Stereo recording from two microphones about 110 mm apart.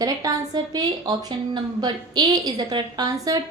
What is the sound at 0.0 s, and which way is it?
A woman's voice, 35° right (ahead or behind).